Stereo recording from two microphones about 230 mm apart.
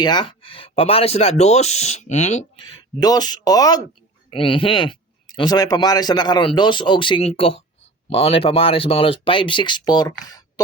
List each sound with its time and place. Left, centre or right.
0.0 s speech: centre
2.6 s speech: centre